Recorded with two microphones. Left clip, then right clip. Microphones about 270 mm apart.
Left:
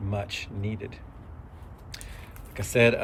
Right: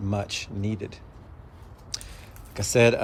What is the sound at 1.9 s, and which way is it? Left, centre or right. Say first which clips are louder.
Chewing: right 7 dB; centre.